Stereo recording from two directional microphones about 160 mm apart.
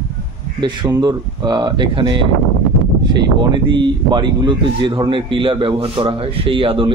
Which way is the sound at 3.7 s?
30° right (ahead or behind).